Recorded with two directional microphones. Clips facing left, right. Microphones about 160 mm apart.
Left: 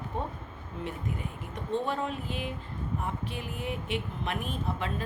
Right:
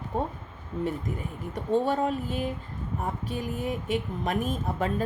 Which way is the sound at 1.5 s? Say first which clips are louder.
Right 6 dB; 40° right (ahead or behind).